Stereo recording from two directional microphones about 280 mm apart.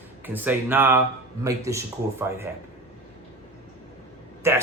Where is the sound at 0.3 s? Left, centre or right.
Centre.